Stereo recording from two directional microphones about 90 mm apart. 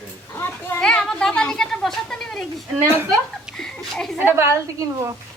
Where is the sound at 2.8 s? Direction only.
25° right (ahead or behind).